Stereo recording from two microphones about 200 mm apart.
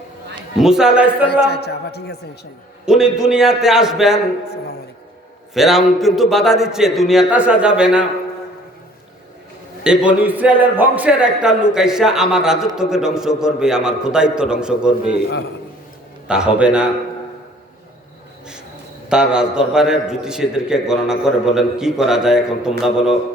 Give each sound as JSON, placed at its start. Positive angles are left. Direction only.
{"t": 0.6, "sound": "a man's voice", "side_deg": -5}
{"t": 1.3, "sound": "a man's voice", "side_deg": 55}
{"t": 2.8, "sound": "a man's voice", "side_deg": -5}
{"t": 5.5, "sound": "a man's voice", "side_deg": 0}
{"t": 9.8, "sound": "a man's voice", "side_deg": -5}
{"t": 16.2, "sound": "a man's voice", "side_deg": -5}
{"t": 19.0, "sound": "a man's voice", "side_deg": -5}